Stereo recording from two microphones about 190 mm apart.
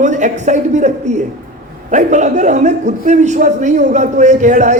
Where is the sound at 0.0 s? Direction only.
40° right (ahead or behind).